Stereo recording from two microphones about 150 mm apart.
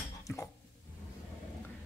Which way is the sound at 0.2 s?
20° left (ahead or behind).